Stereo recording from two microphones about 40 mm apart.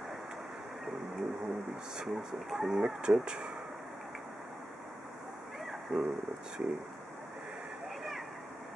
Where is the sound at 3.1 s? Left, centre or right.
Right.